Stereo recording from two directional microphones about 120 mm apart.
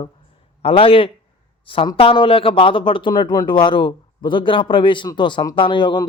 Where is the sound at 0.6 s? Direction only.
50° left (ahead or behind).